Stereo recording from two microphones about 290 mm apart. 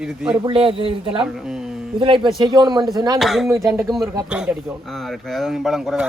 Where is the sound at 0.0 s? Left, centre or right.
Centre.